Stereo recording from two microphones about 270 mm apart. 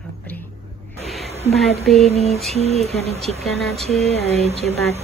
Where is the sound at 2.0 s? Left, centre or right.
Left.